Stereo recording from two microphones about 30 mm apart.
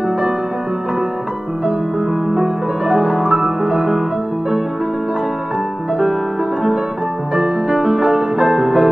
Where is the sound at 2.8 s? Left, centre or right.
Right.